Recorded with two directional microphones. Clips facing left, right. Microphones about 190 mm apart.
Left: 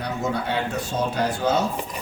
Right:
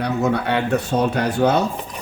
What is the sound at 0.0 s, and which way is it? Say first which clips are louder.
Speech: right 6 dB; 65° right (ahead or behind).